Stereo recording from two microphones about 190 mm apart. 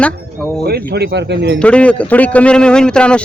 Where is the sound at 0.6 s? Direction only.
55° right (ahead or behind).